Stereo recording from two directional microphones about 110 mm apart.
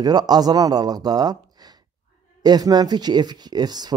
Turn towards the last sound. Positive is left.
turn(degrees=-40)  # may be behind; listen again after turning